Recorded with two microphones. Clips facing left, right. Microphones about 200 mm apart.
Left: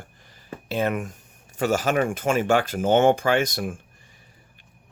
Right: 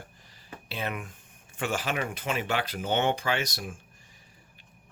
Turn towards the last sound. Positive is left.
turn(degrees=55)  # may be behind; listen again after turning